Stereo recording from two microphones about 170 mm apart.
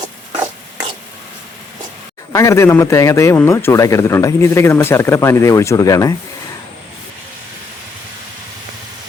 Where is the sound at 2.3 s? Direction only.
15° left (ahead or behind).